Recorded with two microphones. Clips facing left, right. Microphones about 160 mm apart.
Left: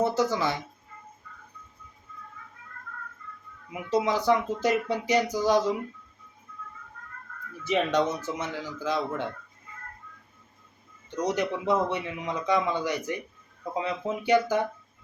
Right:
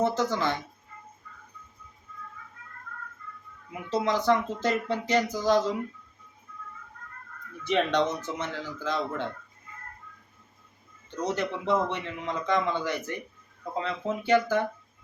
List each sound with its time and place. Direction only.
0.0 s speech: 10° left (ahead or behind)
3.7 s speech: 10° left (ahead or behind)
7.6 s speech: 5° left (ahead or behind)
11.1 s speech: 15° left (ahead or behind)